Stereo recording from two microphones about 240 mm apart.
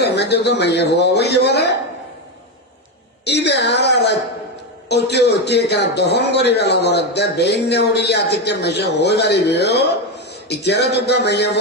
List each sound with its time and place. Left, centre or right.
0.0 s a man's voice: left
3.2 s a man's voice: left